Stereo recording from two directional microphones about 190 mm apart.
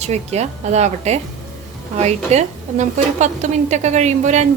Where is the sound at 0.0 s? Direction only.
35° right (ahead or behind).